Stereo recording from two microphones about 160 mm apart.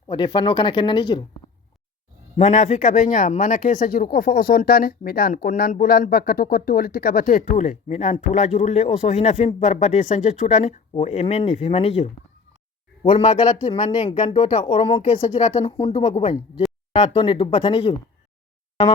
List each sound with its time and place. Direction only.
0.1 s speech: 30° left (ahead or behind)
2.3 s speech: 45° left (ahead or behind)